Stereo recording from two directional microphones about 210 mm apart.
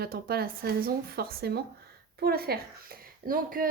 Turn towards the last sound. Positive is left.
turn(degrees=-40)  # may be behind; listen again after turning